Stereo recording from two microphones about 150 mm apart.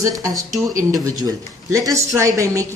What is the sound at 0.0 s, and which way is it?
A woman's voice, 20° right (ahead or behind).